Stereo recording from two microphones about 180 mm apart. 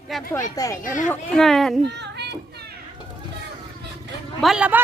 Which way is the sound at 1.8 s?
70° right (ahead or behind).